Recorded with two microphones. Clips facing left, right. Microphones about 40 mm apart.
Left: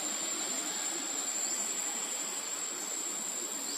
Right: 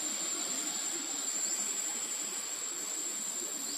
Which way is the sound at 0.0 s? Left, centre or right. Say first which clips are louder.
Left 2 dB; left.